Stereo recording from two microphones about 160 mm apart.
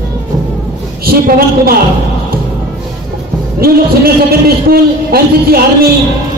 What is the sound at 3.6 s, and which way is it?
A man's voice, 70° right (ahead or behind).